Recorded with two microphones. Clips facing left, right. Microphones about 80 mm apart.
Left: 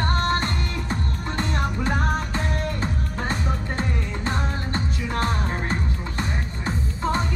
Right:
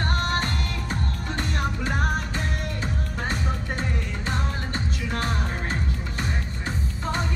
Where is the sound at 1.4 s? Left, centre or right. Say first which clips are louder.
Left 3 dB; left.